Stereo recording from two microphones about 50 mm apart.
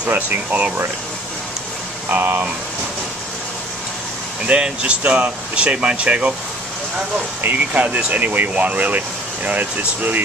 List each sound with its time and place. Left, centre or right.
0.1 s speech: right
2.0 s speech: right
4.5 s speech: centre
7.4 s speech: right